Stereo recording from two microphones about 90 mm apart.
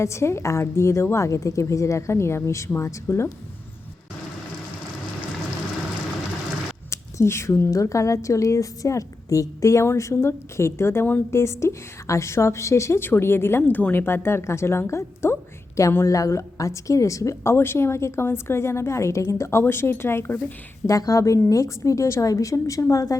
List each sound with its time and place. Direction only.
0.0 s a woman's voice: 30° left (ahead or behind)
6.9 s a woman's voice: 30° left (ahead or behind)
20.8 s a woman's voice: 40° left (ahead or behind)